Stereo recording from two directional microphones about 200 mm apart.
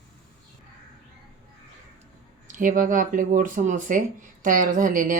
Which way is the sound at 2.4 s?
40° right (ahead or behind).